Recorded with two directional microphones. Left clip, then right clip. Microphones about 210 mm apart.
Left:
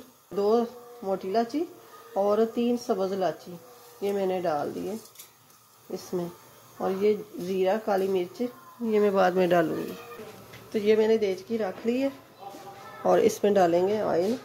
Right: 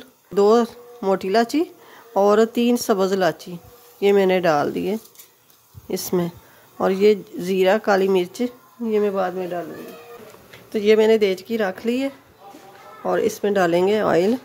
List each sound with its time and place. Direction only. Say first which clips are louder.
0.4 s speech: right 9 dB; 35° right (ahead or behind)
8.8 s speech: right 3 dB; 15° right (ahead or behind)
10.7 s speech: right 7 dB; 25° right (ahead or behind)
13.0 s speech: right 1 dB; 5° right (ahead or behind); by 14.2 s 30° right (ahead or behind)